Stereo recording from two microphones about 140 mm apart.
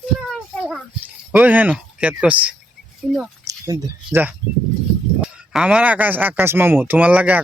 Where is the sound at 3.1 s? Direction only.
Centre (ahead or behind).